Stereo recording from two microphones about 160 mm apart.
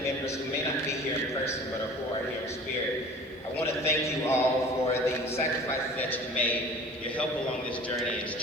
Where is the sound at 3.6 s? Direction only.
15° left (ahead or behind).